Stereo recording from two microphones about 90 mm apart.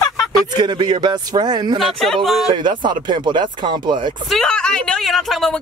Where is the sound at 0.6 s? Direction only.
60° right (ahead or behind).